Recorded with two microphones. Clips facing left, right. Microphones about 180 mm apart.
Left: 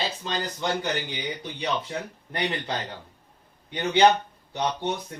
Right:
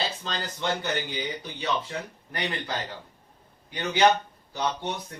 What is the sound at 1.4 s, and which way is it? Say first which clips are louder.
Speech: left 1 dB; 20° left (ahead or behind).